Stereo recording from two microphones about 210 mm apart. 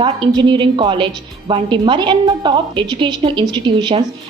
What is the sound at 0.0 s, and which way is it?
A woman's voice, 20° right (ahead or behind).